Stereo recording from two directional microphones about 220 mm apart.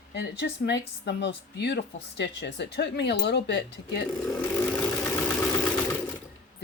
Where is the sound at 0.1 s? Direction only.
45° left (ahead or behind).